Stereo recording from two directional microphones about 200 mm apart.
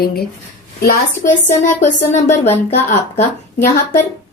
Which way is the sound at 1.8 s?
35° left (ahead or behind).